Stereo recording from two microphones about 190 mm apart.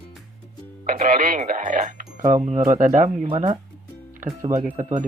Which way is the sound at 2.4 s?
40° right (ahead or behind).